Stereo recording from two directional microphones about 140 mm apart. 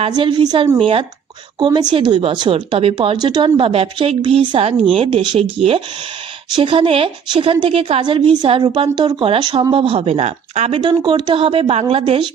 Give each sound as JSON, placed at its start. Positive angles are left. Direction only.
{"t": 0.1, "sound": "speech", "side_deg": -35}
{"t": 10.8, "sound": "speech", "side_deg": -35}